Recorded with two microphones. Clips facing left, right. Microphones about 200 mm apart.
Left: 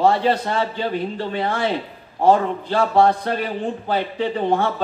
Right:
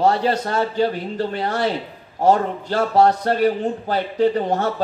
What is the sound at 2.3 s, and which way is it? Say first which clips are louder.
A man's voice: left 1 dB; 45° right (ahead or behind).